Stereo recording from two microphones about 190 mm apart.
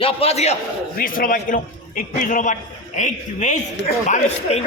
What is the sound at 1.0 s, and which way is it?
A man's voice, 50° left (ahead or behind).